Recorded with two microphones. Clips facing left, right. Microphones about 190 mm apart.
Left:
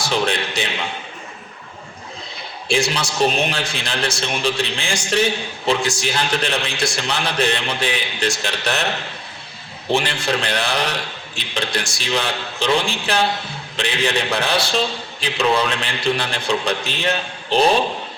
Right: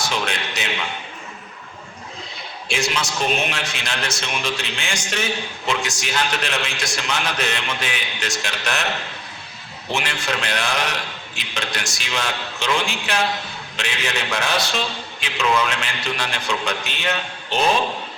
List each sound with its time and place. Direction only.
0.0 s a man's voice: 30° left (ahead or behind)
2.6 s a man's voice: 30° left (ahead or behind)
9.9 s a man's voice: 35° left (ahead or behind)